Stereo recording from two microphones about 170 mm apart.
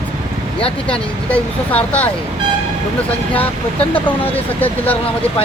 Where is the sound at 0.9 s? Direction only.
10° left (ahead or behind).